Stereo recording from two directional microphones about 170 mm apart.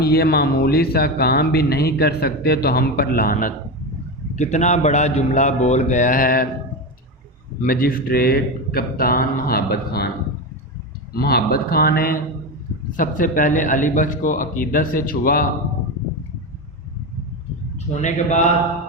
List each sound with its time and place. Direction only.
0.0 s speech: 65° left (ahead or behind)
4.4 s speech: 45° left (ahead or behind)
7.6 s speech: 55° left (ahead or behind)
11.1 s speech: 65° left (ahead or behind)
13.0 s speech: 50° left (ahead or behind)
18.0 s speech: 45° left (ahead or behind)